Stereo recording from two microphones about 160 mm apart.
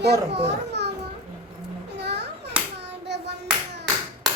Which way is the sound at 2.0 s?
90° right.